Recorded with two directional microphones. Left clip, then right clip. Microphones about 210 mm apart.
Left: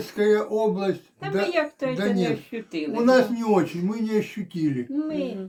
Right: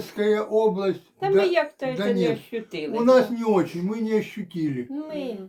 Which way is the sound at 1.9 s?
5° left (ahead or behind).